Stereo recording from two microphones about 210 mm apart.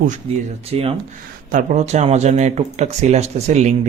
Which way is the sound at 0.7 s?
30° right (ahead or behind).